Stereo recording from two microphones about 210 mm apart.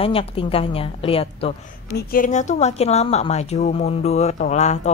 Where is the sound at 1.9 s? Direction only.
40° left (ahead or behind).